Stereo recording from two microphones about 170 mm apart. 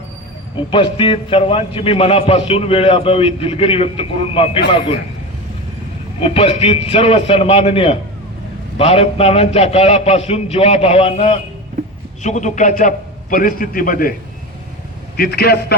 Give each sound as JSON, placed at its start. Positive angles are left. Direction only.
{"t": 0.7, "sound": "a man's voice", "side_deg": 35}
{"t": 6.1, "sound": "a man's voice", "side_deg": 35}
{"t": 15.1, "sound": "a man's voice", "side_deg": 65}